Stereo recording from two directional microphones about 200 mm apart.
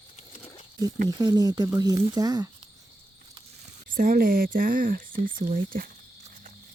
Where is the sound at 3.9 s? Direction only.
45° right (ahead or behind).